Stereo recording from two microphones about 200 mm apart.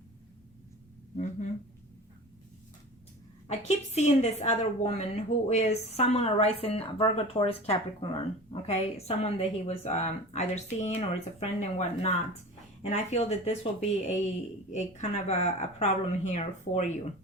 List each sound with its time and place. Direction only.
1.1 s a woman's voice: 35° left (ahead or behind)
3.4 s a woman's voice: 35° left (ahead or behind)
14.7 s a woman's voice: 35° left (ahead or behind)